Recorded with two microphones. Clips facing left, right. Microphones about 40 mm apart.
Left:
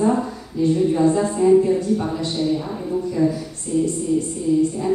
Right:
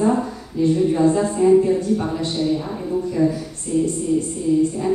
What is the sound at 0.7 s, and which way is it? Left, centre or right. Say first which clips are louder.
A woman's voice: even; centre.